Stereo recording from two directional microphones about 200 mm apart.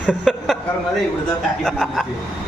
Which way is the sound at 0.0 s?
5° right (ahead or behind).